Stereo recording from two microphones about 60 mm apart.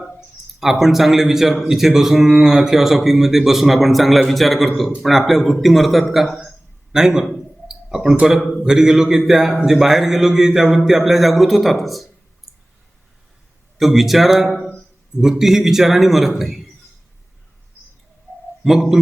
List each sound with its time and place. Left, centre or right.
0.6 s a man's voice: centre
6.9 s a man's voice: centre
7.7 s a sound: centre
8.6 s a man's voice: centre
12.5 s clicking: centre
13.7 s a man's voice: centre
14.5 s a sound: centre
15.2 s a man's voice: centre
18.3 s a sound: left
18.6 s a man's voice: centre